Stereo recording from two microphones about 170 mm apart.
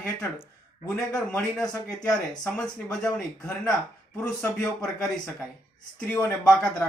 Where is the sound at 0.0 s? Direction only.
20° left (ahead or behind).